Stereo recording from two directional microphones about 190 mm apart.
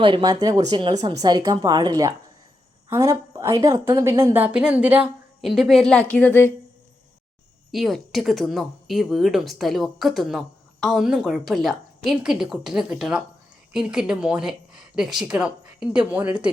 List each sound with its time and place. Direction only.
0.0 s a woman's voice: 25° right (ahead or behind); by 6.5 s 10° left (ahead or behind)
7.7 s speech: centre (ahead or behind)